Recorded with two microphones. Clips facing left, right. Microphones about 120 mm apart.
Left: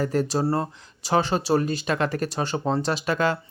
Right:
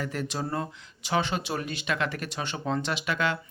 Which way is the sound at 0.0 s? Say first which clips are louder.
Left 9 dB; 40° left (ahead or behind).